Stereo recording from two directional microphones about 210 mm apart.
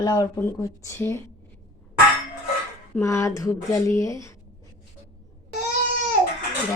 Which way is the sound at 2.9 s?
15° left (ahead or behind).